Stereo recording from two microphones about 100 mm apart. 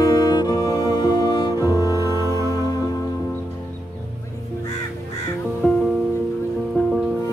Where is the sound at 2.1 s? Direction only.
30° right (ahead or behind).